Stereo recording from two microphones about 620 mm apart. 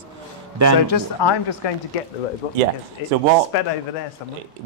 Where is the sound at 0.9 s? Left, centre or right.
Left.